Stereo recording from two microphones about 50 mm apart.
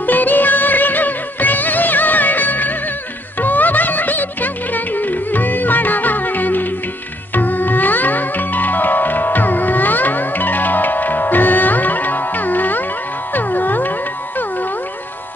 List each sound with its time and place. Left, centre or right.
0.0 s music: left